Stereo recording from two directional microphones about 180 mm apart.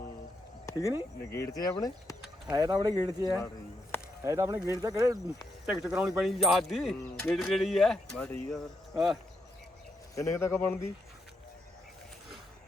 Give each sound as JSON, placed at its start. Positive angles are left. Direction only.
{"t": 0.6, "sound": "a sound", "side_deg": 15}
{"t": 1.3, "sound": "speech", "side_deg": 20}
{"t": 2.5, "sound": "speech", "side_deg": -20}
{"t": 5.6, "sound": "speech", "side_deg": -5}
{"t": 10.2, "sound": "speech", "side_deg": 15}